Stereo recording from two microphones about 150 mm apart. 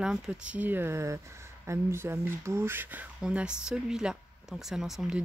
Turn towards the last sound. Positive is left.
turn(degrees=-5)  # may be behind; listen again after turning